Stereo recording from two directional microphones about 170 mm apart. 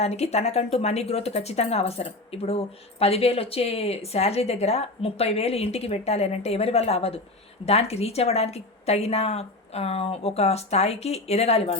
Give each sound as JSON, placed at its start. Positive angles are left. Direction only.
{"t": 0.0, "sound": "speech", "side_deg": 40}